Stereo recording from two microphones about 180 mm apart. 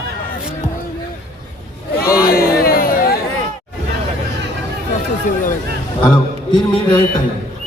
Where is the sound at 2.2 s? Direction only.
55° left (ahead or behind).